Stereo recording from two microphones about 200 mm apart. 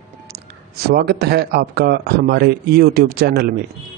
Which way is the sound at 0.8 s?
55° right (ahead or behind).